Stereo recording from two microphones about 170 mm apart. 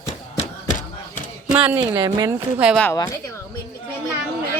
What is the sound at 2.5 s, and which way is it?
Speech, 5° right (ahead or behind).